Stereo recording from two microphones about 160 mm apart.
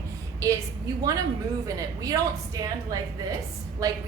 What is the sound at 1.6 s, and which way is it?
A woman's voice, 20° right (ahead or behind).